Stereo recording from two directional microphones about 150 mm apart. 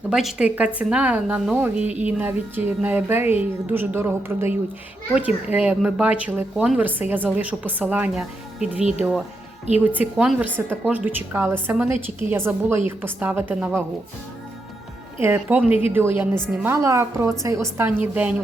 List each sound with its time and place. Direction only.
0.1 s a woman's voice: 5° right (ahead or behind)
15.2 s a woman's voice: 15° right (ahead or behind)